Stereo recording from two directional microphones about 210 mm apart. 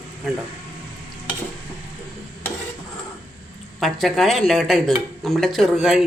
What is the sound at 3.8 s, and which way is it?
Speech, centre (ahead or behind).